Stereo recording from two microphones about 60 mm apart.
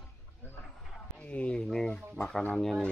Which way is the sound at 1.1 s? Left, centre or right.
Left.